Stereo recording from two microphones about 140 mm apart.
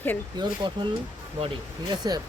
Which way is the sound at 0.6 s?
35° right (ahead or behind).